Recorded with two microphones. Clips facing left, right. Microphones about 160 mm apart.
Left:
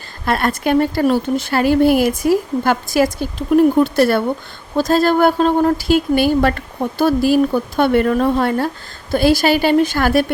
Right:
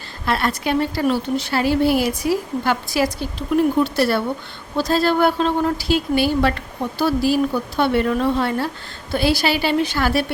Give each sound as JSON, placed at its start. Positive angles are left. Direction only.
{"t": 0.3, "sound": "speech", "side_deg": 50}